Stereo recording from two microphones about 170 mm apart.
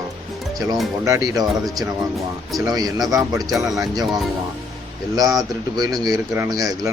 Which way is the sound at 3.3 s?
Centre (ahead or behind).